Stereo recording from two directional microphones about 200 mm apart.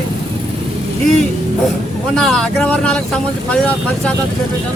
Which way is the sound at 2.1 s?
5° left (ahead or behind).